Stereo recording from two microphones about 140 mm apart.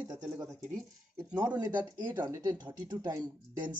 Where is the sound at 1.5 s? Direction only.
25° right (ahead or behind).